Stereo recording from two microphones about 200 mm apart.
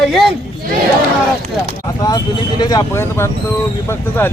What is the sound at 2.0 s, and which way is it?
Speech, 20° left (ahead or behind).